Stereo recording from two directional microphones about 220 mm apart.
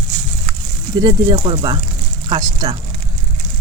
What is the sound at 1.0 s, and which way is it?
Speech, 20° right (ahead or behind).